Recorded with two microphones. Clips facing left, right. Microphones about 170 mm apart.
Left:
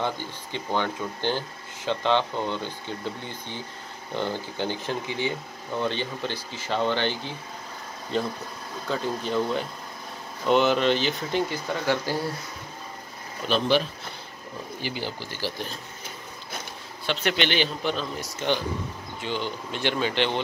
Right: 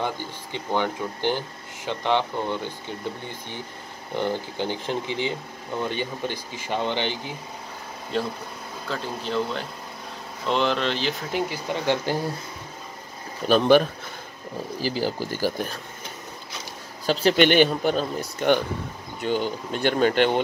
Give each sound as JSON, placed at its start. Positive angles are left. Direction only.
{"t": 0.0, "sound": "speech", "side_deg": -15}
{"t": 8.8, "sound": "speech", "side_deg": 0}
{"t": 11.8, "sound": "speech", "side_deg": -20}
{"t": 13.5, "sound": "speech", "side_deg": -50}
{"t": 14.8, "sound": "speech", "side_deg": -40}
{"t": 17.0, "sound": "speech", "side_deg": -35}
{"t": 17.4, "sound": "speech", "side_deg": -50}